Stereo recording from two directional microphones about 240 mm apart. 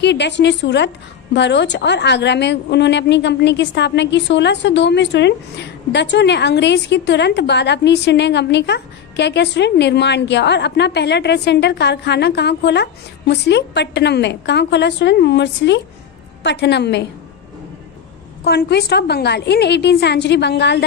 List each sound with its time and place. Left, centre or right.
0.0 s a woman's voice: left
18.4 s a woman's voice: left